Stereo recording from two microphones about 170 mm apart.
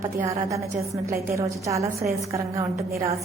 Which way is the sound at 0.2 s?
15° right (ahead or behind).